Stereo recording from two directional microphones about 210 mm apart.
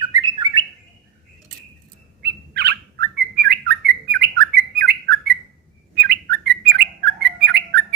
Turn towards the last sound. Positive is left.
turn(degrees=-55)  # may be behind; listen again after turning